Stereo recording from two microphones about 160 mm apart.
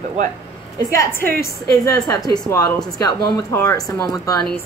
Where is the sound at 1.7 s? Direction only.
20° left (ahead or behind).